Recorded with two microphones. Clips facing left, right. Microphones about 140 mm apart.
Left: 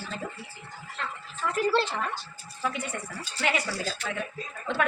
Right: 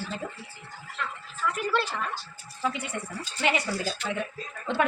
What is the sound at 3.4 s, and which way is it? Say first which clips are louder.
Speech: right 2 dB; 20° right (ahead or behind).